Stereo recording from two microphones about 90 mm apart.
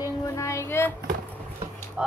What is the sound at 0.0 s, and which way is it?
Child singing, 35° left (ahead or behind).